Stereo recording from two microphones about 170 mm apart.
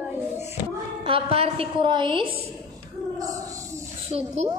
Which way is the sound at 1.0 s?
35° right (ahead or behind).